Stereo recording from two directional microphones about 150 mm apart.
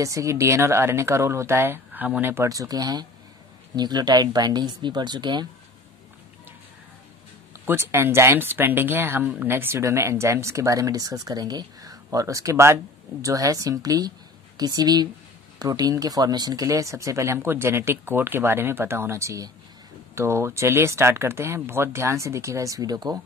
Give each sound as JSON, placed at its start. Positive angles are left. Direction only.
{"t": 0.0, "sound": "speech", "side_deg": -20}
{"t": 7.6, "sound": "speech", "side_deg": -15}